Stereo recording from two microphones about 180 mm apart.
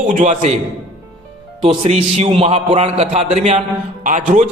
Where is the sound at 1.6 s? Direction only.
35° right (ahead or behind).